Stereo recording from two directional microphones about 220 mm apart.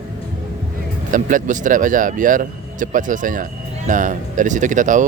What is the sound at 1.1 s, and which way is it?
Speech, 35° right (ahead or behind).